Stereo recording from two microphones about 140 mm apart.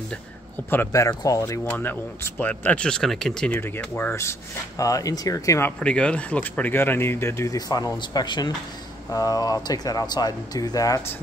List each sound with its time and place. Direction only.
0.7 s speech: 20° left (ahead or behind)